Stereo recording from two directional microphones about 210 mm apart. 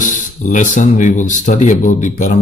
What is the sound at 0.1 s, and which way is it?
Speech, 35° left (ahead or behind).